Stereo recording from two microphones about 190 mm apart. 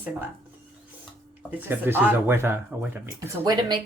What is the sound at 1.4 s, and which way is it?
Speech, 10° right (ahead or behind).